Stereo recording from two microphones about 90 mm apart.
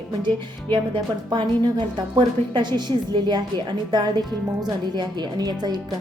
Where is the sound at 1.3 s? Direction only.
55° right (ahead or behind).